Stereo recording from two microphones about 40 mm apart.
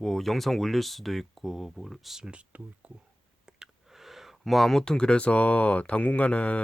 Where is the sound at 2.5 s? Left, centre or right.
Right.